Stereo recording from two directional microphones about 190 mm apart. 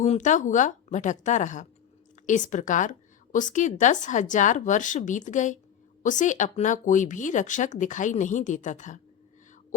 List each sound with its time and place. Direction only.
0.0 s speech: 40° left (ahead or behind)